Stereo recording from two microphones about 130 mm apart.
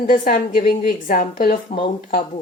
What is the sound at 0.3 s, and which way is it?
Speech, 45° left (ahead or behind).